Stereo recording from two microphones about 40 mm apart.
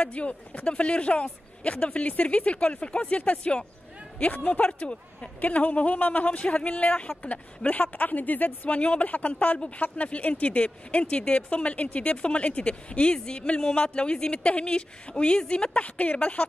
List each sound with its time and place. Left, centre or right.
0.0 s speech: left
4.7 s speech: left
5.4 s speech: left
6.2 s speech: left
8.7 s speech: left